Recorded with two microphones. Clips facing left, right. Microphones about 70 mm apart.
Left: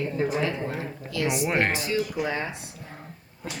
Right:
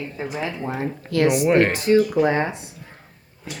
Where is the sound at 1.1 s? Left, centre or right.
Right.